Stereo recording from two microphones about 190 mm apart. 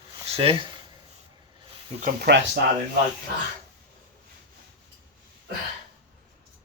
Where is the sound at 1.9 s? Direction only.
45° right (ahead or behind).